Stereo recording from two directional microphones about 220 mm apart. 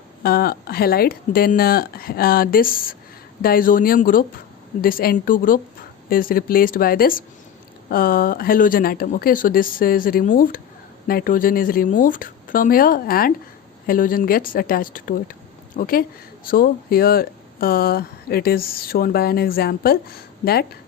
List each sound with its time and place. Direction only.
0.2 s speech: 45° left (ahead or behind)